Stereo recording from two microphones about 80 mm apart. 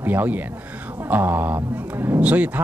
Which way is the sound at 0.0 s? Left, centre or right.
Right.